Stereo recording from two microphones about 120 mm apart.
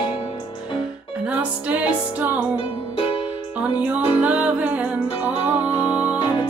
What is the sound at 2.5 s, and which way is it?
Music, 45° left (ahead or behind).